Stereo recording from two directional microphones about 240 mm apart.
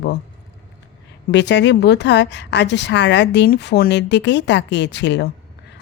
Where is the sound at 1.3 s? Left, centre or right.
Left.